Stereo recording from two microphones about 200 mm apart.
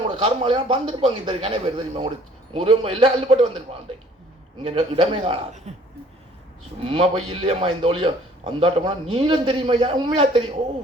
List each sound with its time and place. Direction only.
0.2 s a man's voice: 25° right (ahead or behind)
6.8 s a man's voice: 25° right (ahead or behind)